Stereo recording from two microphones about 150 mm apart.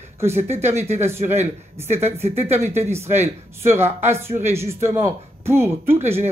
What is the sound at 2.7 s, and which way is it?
Speech, 15° right (ahead or behind).